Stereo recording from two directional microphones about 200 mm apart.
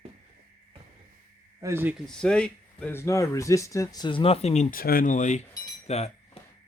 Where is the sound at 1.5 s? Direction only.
15° right (ahead or behind).